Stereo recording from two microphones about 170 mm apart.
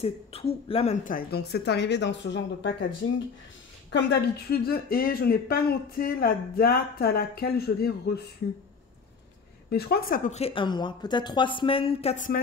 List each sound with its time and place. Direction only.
0.0 s speech: 35° left (ahead or behind)
1.0 s speech: 60° left (ahead or behind); by 3.2 s 90° left
3.9 s speech: 75° left (ahead or behind)
9.7 s speech: 65° left (ahead or behind)
10.3 s a woman's voice: 35° left (ahead or behind)